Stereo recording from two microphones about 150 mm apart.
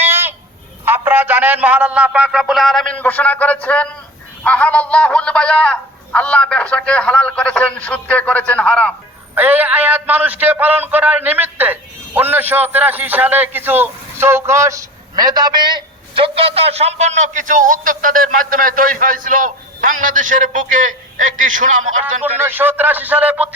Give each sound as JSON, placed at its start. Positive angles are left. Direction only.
{"t": 0.0, "sound": "a sound", "side_deg": -15}
{"t": 0.9, "sound": "a man's voice", "side_deg": -15}
{"t": 9.3, "sound": "a man's voice", "side_deg": -10}
{"t": 22.2, "sound": "speech", "side_deg": -15}